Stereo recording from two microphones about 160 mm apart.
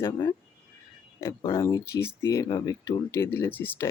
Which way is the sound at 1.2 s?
20° left (ahead or behind).